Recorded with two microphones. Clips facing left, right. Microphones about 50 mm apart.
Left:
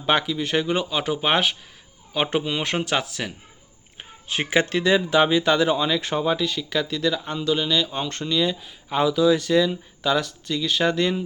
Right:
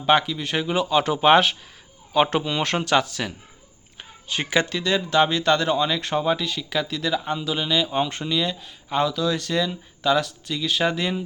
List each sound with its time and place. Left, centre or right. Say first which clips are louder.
0.0 s speech: right 2 dB; centre
3.9 s a sound: left 1 dB; left
4.8 s speech: left 3 dB; centre